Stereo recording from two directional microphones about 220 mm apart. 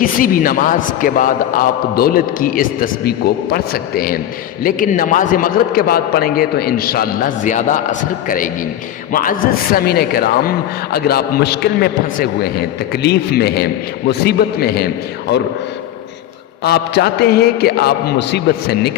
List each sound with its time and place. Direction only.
0.0 s a man's voice: 40° left (ahead or behind)
9.1 s a man's voice: 40° left (ahead or behind)
16.6 s a man's voice: 45° left (ahead or behind)